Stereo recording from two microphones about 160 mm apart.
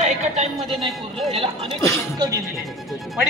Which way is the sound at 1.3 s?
35° right (ahead or behind).